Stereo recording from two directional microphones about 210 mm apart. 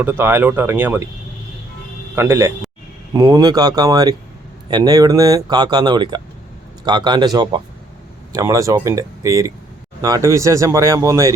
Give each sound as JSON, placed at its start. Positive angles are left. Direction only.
{"t": 0.0, "sound": "speech", "side_deg": -10}
{"t": 2.1, "sound": "speech", "side_deg": -15}